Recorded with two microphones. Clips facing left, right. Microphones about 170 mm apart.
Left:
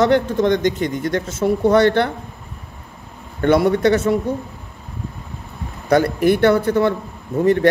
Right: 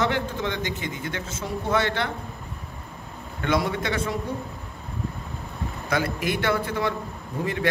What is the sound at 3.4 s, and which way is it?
Speech, 60° left (ahead or behind).